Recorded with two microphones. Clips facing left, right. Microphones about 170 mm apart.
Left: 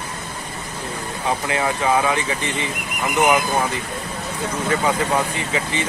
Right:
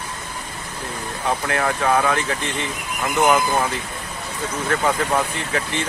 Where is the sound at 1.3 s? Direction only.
15° left (ahead or behind).